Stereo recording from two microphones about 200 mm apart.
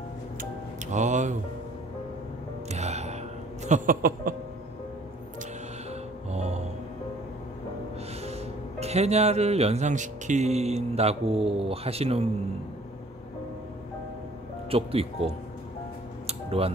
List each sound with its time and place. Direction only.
0.9 s speech: 35° right (ahead or behind)
2.7 s music: 35° right (ahead or behind)
3.6 s a sound: 40° right (ahead or behind)
6.3 s music: 35° right (ahead or behind)
8.2 s speech: 30° right (ahead or behind)
14.7 s speech: 30° right (ahead or behind)
16.3 s music: 30° right (ahead or behind)